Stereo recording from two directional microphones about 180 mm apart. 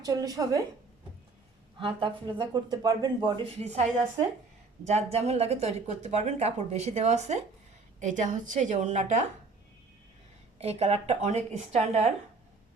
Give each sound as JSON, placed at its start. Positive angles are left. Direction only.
{"t": 0.0, "sound": "speech", "side_deg": -20}
{"t": 1.8, "sound": "a woman's voice", "side_deg": -30}
{"t": 10.6, "sound": "speech", "side_deg": -35}